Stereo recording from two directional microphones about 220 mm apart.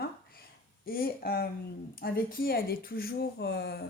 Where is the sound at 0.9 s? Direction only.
40° left (ahead or behind).